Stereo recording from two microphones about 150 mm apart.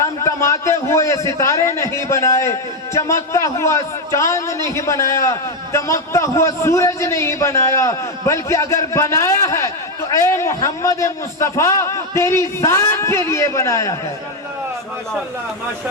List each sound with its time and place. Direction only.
0.0 s a man's voice: 20° left (ahead or behind)